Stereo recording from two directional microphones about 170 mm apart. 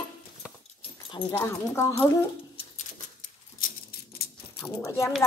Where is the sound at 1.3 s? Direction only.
15° left (ahead or behind).